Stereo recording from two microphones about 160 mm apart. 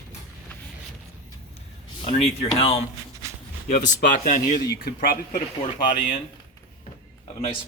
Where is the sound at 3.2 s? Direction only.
20° right (ahead or behind).